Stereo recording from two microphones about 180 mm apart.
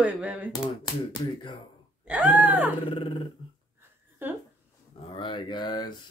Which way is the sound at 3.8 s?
10° right (ahead or behind).